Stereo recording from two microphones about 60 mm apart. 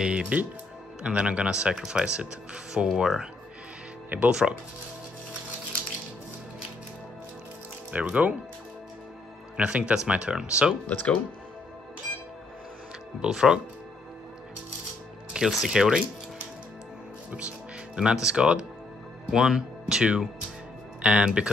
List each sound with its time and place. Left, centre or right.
0.0 s speech: centre
4.3 s speech: centre
7.9 s speech: right
9.6 s speech: centre
10.9 s speech: left
13.2 s speech: centre
15.3 s speech: centre
17.3 s speech: right
17.9 s speech: centre